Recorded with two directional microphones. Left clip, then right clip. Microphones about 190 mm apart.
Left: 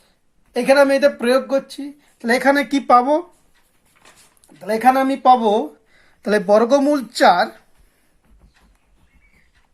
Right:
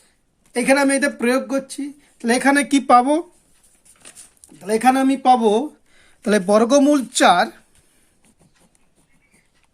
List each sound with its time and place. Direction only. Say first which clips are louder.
0.5 s speech: left 3 dB; 25° right (ahead or behind)
4.4 s speech: even; 30° right (ahead or behind)